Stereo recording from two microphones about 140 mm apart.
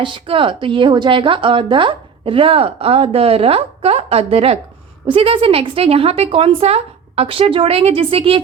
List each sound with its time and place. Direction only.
0.0 s a woman's voice: 35° right (ahead or behind)